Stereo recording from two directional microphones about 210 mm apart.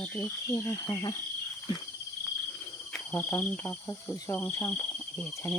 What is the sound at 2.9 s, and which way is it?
Cricket, 10° left (ahead or behind).